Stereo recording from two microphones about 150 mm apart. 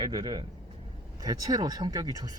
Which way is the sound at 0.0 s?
30° right (ahead or behind).